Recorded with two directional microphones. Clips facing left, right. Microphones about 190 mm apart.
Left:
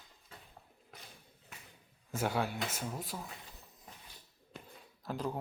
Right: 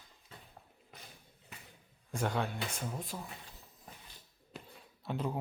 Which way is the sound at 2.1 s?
5° left (ahead or behind).